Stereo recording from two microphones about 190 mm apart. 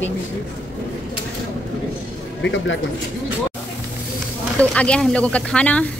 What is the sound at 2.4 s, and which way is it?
Speech, 80° left.